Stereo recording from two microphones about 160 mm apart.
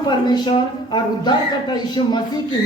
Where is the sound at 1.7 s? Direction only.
25° left (ahead or behind).